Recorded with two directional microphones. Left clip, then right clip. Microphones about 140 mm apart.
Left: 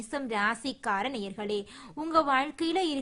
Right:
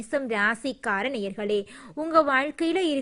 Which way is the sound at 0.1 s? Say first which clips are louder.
Right 5 dB; 25° right (ahead or behind).